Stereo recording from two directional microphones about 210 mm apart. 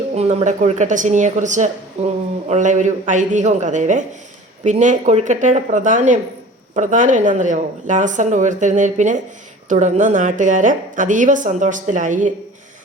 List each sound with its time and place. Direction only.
0.1 s a woman's voice: 30° right (ahead or behind)